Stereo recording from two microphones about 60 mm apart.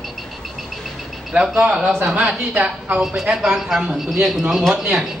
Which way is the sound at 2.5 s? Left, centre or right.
Right.